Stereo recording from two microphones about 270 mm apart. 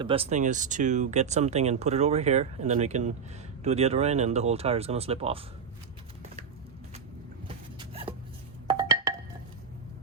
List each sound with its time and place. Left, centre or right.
0.0 s speech: right
7.4 s vehicle: centre
8.7 s a sound: centre